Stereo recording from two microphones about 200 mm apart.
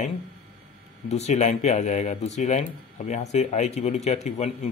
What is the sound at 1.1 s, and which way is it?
Speech, 35° left (ahead or behind).